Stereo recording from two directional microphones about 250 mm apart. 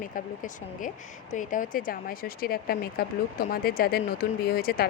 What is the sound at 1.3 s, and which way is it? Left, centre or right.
Speech, left.